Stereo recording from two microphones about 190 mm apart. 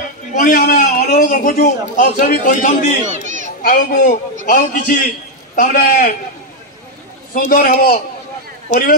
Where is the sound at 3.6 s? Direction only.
45° left (ahead or behind).